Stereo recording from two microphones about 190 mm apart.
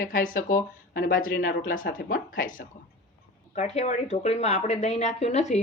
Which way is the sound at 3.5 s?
35° left (ahead or behind).